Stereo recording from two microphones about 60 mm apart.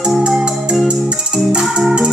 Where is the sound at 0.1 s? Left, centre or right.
Centre.